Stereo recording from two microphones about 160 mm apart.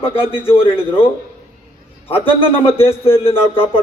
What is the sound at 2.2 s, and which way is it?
A man's voice, 35° left (ahead or behind).